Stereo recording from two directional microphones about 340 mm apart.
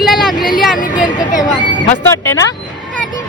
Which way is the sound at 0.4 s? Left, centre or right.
Centre.